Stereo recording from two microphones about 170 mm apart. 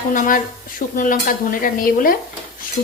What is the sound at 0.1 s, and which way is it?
Dishes, 55° left (ahead or behind).